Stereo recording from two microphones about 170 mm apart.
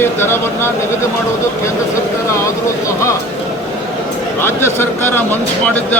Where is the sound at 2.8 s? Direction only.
15° left (ahead or behind).